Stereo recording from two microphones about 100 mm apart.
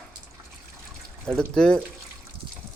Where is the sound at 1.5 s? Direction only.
10° left (ahead or behind).